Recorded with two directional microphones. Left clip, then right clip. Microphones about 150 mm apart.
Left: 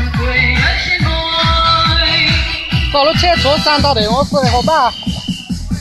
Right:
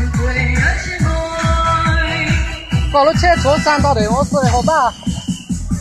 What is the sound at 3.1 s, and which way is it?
Speech, 45° left (ahead or behind).